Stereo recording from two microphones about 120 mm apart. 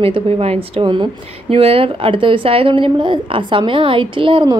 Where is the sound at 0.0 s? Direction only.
50° right (ahead or behind).